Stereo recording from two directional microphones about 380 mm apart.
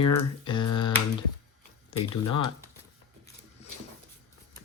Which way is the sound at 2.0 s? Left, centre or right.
Left.